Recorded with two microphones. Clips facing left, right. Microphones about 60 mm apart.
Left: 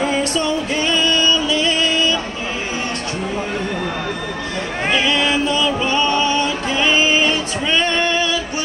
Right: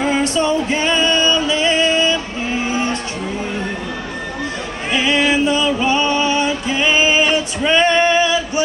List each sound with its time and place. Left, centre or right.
0.0 s music: right
5.0 s music: right